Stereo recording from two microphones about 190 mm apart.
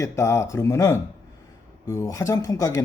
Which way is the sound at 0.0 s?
15° left (ahead or behind).